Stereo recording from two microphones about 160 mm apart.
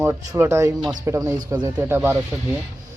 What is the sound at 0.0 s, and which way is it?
Speech, 15° right (ahead or behind).